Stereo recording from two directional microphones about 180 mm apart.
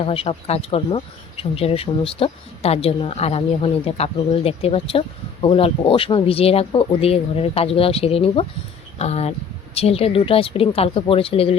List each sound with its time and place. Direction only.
0.0 s speech: 30° left (ahead or behind)